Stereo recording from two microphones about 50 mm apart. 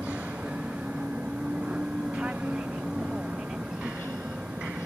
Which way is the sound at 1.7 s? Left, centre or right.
Right.